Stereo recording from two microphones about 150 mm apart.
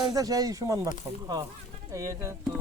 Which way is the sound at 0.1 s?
25° right (ahead or behind).